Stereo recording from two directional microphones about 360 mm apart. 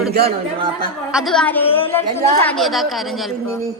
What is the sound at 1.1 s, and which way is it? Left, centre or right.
A woman's voice, centre.